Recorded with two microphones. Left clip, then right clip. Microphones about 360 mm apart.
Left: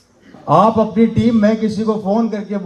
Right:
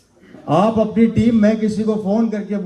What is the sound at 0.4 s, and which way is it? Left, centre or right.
A man's voice, left.